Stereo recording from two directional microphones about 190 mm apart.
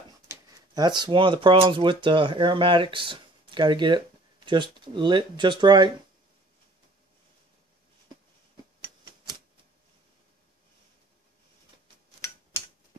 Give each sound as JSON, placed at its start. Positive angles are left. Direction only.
{"t": 0.3, "sound": "speech", "side_deg": -20}